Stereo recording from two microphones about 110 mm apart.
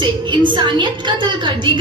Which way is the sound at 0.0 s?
45° right (ahead or behind).